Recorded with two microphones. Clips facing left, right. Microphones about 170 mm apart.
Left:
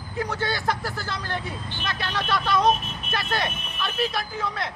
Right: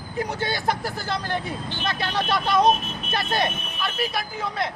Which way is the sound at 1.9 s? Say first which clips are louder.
Right 2 dB; 15° right (ahead or behind).